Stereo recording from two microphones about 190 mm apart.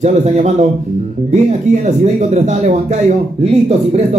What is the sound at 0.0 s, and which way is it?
Speech, 35° right (ahead or behind).